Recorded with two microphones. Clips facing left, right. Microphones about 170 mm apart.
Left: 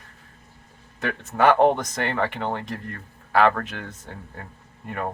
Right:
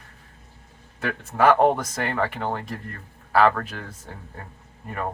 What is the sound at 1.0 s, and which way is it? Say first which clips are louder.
Speech: even; 40° right (ahead or behind).